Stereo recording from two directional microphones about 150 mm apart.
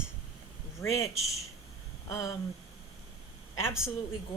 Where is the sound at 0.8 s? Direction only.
20° left (ahead or behind).